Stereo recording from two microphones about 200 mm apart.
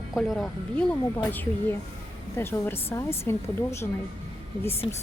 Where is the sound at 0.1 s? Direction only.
Centre (ahead or behind).